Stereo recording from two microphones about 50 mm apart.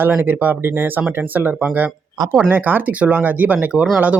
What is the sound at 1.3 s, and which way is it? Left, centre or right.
Speech, right.